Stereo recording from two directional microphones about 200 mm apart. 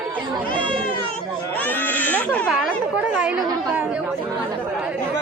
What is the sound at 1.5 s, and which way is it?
Speech, 10° left (ahead or behind).